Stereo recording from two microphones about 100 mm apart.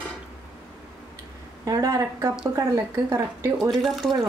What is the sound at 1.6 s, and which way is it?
Speech, 35° right (ahead or behind).